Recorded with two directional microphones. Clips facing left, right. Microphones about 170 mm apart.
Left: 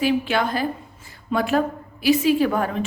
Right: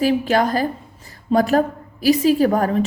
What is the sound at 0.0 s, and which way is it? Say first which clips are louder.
A woman's voice: right 4 dB; 40° right (ahead or behind).